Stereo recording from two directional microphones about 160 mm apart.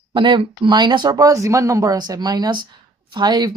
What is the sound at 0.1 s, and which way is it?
Speech, 30° right (ahead or behind).